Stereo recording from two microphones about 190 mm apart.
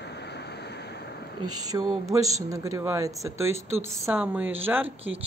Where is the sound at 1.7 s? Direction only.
20° right (ahead or behind).